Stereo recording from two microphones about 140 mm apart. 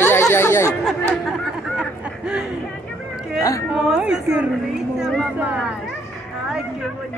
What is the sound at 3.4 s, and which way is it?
Speech, 25° left (ahead or behind).